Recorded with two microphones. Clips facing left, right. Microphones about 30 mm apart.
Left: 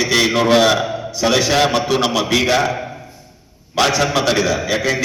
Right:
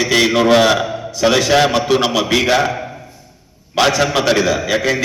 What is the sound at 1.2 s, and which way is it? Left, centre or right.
A man's voice, centre.